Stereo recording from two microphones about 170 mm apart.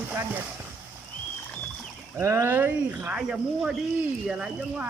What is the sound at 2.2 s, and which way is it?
Speech, 15° right (ahead or behind).